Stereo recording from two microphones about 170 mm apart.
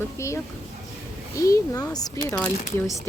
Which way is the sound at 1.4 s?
20° left (ahead or behind).